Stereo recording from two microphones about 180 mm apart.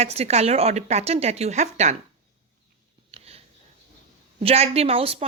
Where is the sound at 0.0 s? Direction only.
35° right (ahead or behind).